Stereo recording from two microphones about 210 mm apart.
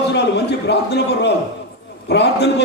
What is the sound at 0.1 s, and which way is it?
A man's voice, 55° left (ahead or behind).